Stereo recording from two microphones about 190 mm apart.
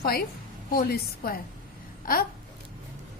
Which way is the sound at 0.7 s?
50° left (ahead or behind).